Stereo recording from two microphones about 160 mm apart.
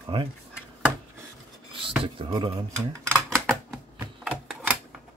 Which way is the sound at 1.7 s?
35° right (ahead or behind).